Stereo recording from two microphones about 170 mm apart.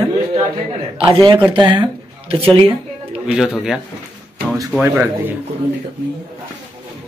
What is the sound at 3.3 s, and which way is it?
Speech, 5° right (ahead or behind).